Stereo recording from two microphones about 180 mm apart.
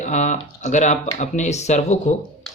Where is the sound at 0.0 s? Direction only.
40° left (ahead or behind).